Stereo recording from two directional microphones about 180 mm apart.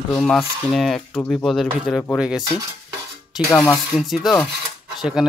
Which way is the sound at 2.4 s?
20° right (ahead or behind).